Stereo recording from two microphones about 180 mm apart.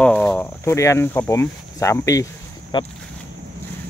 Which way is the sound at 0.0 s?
5° left (ahead or behind).